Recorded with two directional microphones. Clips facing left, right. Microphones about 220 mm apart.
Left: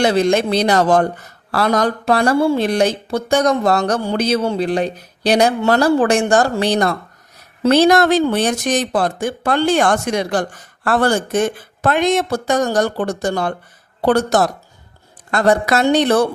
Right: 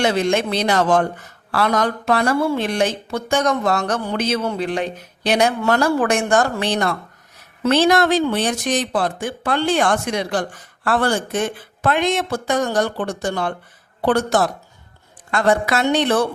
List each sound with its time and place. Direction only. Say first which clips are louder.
0.0 s speech: left 4 dB; 35° left (ahead or behind)